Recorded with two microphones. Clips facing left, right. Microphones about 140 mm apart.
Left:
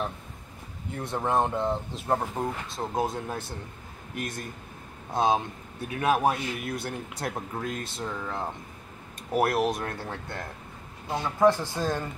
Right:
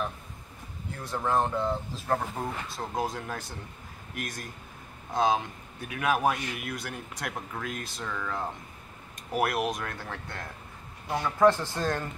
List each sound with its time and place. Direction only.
1.0 s a man's voice: 20° left (ahead or behind)
9.4 s speech: 30° left (ahead or behind)
11.1 s speech: 20° left (ahead or behind)